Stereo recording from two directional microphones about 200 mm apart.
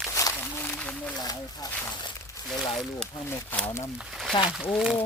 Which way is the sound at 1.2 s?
20° left (ahead or behind).